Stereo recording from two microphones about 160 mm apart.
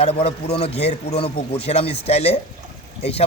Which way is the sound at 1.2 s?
40° left (ahead or behind).